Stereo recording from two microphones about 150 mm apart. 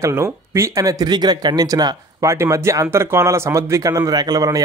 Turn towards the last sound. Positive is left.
turn(degrees=-25)  # may be behind; listen again after turning